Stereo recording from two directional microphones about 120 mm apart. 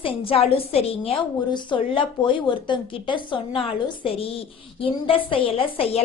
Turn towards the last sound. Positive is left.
turn(degrees=55)  # may be behind; listen again after turning